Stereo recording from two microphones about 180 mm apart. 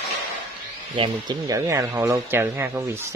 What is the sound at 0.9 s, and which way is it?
Speech, 25° right (ahead or behind).